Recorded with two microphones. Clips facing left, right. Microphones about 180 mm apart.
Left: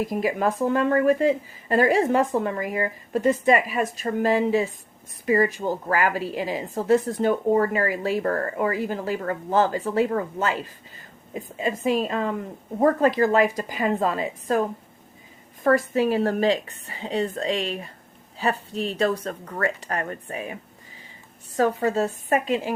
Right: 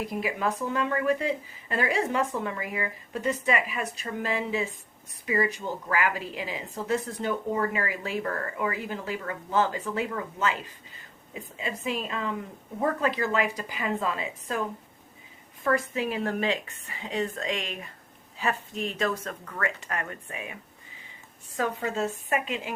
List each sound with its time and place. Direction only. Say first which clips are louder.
0.0 s a woman's voice: left 6 dB; 40° left (ahead or behind)
15.6 s a woman's voice: left 7 dB; 40° left (ahead or behind)